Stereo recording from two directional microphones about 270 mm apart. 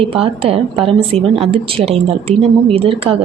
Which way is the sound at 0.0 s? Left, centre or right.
Right.